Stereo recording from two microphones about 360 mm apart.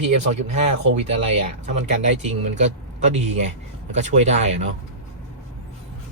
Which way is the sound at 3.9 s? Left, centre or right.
Centre.